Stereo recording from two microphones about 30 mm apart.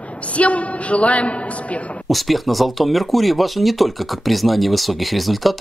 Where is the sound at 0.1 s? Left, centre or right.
Left.